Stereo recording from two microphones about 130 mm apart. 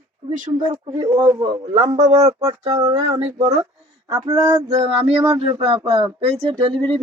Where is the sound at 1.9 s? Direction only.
60° right (ahead or behind).